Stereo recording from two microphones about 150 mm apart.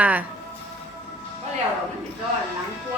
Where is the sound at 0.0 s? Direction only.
10° right (ahead or behind).